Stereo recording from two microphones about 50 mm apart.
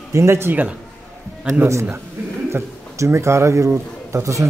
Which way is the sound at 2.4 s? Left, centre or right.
Right.